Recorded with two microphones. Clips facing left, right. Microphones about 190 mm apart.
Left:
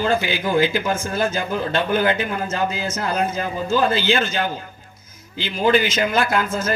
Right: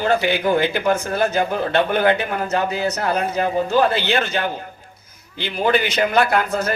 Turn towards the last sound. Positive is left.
turn(degrees=-65)  # may be behind; listen again after turning